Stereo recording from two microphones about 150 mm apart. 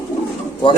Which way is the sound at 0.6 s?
35° left (ahead or behind).